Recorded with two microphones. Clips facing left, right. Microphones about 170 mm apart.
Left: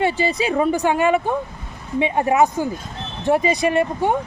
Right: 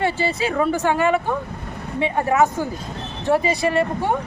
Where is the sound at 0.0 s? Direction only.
15° left (ahead or behind).